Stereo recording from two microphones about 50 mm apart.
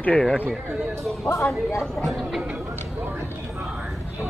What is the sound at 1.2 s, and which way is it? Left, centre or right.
Speech, left.